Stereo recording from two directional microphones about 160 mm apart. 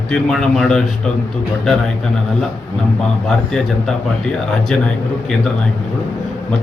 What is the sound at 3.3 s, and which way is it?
Speech, 5° left (ahead or behind).